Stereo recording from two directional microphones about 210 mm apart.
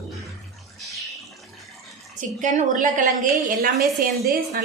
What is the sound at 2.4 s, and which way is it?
Speech, 40° right (ahead or behind).